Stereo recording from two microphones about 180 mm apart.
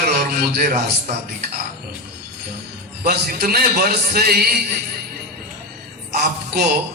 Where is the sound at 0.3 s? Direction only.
55° right (ahead or behind).